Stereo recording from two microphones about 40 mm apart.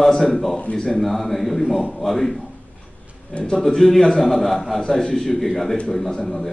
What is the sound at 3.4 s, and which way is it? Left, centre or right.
A man's voice, centre.